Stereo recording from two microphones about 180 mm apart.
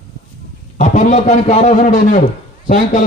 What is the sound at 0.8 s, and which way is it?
A man's voice, 40° left (ahead or behind).